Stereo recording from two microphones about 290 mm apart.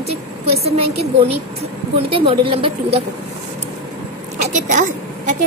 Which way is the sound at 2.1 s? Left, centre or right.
Centre.